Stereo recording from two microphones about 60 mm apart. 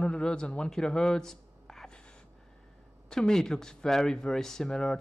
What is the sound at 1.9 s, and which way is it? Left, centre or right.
Gasp, centre.